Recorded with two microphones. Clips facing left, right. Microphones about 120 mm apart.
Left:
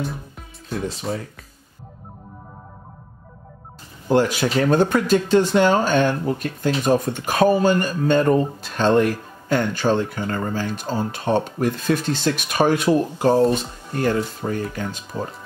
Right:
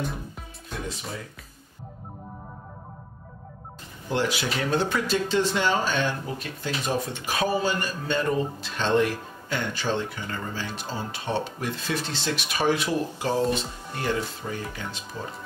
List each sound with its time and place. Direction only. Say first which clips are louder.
1.1 s speech: left 10 dB; 55° left (ahead or behind)
4.1 s speech: left 8 dB; 45° left (ahead or behind)